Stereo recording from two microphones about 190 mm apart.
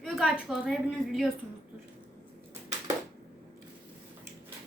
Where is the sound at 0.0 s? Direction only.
Centre (ahead or behind).